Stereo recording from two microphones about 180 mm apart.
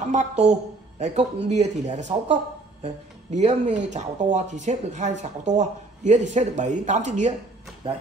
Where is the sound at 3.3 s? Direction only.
40° right (ahead or behind).